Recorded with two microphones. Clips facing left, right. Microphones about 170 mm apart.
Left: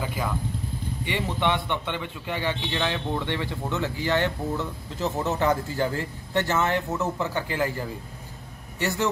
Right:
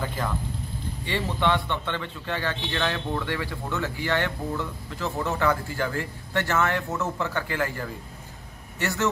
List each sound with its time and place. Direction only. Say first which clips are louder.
0.0 s vehicle: even; 10° left (ahead or behind)
1.0 s speech: right 1 dB; 15° left (ahead or behind)
8.7 s a man's voice: even; 15° left (ahead or behind)